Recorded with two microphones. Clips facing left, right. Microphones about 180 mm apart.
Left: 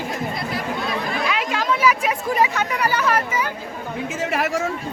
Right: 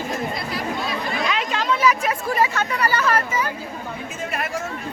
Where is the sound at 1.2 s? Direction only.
10° left (ahead or behind).